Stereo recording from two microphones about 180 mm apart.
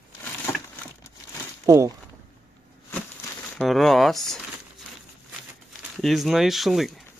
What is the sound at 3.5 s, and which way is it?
Speech, centre (ahead or behind).